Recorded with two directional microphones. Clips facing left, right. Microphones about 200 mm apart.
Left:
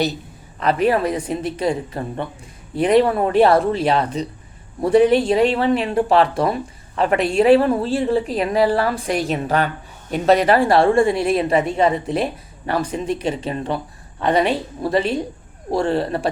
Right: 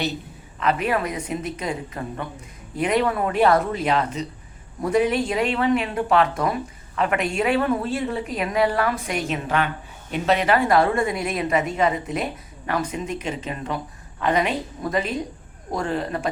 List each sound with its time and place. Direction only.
0.6 s speech: 35° left (ahead or behind)